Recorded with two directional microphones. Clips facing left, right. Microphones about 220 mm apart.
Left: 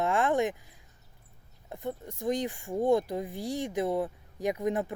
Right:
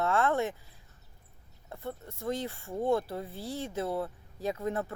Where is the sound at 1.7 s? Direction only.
15° left (ahead or behind).